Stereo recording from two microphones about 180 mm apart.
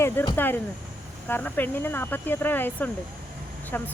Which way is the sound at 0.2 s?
10° left (ahead or behind).